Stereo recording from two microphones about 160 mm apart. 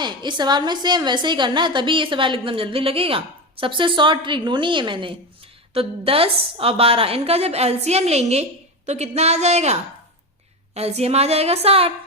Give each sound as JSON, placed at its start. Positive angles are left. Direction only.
{"t": 0.0, "sound": "a woman's voice", "side_deg": -30}
{"t": 10.8, "sound": "a woman's voice", "side_deg": -40}